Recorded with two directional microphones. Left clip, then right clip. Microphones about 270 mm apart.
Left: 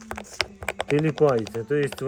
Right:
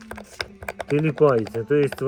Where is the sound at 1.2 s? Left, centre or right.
Centre.